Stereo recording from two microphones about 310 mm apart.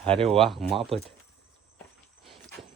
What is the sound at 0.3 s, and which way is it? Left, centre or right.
Speech, centre.